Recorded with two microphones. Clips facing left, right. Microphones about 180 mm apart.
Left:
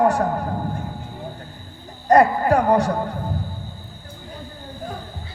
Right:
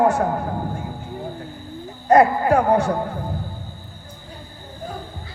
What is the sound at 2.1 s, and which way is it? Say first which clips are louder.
Speech: even; 35° left (ahead or behind).